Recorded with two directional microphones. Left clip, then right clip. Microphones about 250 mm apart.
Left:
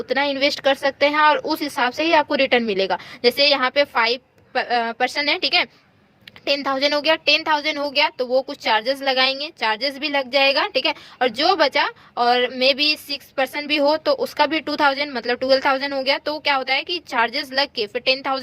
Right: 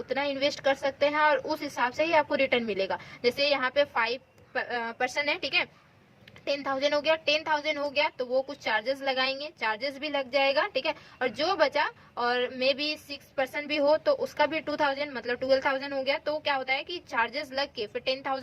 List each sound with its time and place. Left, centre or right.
0.1 s a woman's voice: left